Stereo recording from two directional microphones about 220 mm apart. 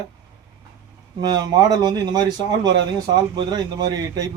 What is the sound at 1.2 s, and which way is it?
Speech, 15° right (ahead or behind).